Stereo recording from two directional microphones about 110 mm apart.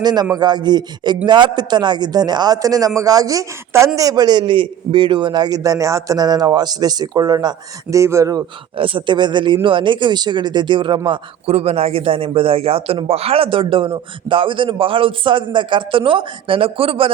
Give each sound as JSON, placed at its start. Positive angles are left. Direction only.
{"t": 0.0, "sound": "a man's voice", "side_deg": -40}
{"t": 8.7, "sound": "speech", "side_deg": -50}